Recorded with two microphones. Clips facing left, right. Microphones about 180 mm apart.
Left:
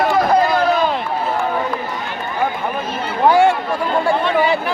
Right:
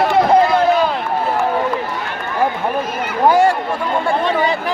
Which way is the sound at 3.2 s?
Centre (ahead or behind).